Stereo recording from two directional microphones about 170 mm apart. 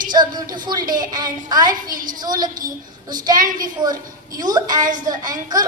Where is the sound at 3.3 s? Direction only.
55° right (ahead or behind).